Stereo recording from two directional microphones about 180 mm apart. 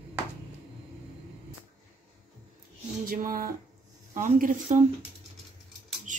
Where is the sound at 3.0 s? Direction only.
55° right (ahead or behind).